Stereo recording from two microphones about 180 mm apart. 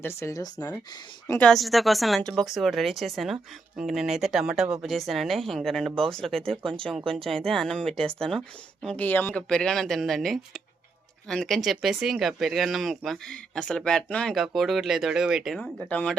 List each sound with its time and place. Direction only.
0.0 s speech: 15° left (ahead or behind)
1.3 s speech: 5° left (ahead or behind)
6.6 s speech: 30° right (ahead or behind)
7.3 s speech: centre (ahead or behind)